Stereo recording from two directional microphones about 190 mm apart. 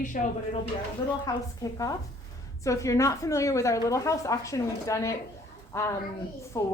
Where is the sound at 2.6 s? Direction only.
15° left (ahead or behind).